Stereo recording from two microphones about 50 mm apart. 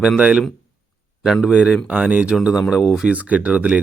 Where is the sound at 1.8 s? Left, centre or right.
Right.